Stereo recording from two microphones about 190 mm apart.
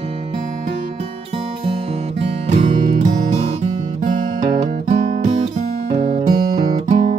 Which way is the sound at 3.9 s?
40° right (ahead or behind).